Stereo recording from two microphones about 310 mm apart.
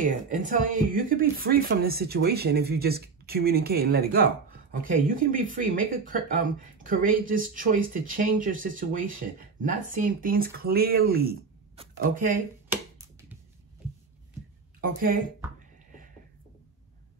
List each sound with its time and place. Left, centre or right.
0.0 s speech: right
11.7 s speech: centre
14.8 s speech: right